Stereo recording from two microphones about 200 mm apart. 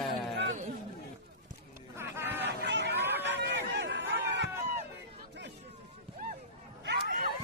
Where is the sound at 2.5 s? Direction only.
60° right (ahead or behind).